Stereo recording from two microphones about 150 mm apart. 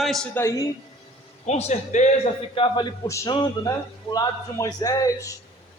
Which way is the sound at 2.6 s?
30° left (ahead or behind).